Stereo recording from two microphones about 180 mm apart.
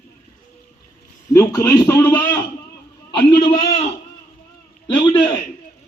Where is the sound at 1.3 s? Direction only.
15° left (ahead or behind).